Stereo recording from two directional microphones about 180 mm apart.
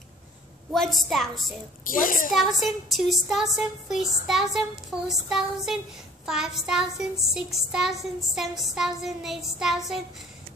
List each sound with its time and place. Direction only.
0.7 s child singing: centre (ahead or behind)
1.9 s a child's voice: 50° left (ahead or behind)
2.3 s child singing: centre (ahead or behind)